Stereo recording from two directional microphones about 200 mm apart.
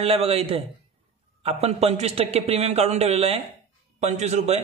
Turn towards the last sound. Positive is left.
turn(degrees=-35)  # may be behind; listen again after turning